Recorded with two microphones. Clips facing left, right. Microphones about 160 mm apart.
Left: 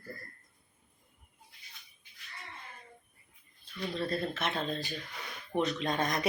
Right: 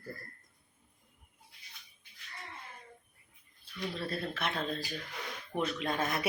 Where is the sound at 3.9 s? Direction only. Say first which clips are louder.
Left 5 dB; 5° right (ahead or behind).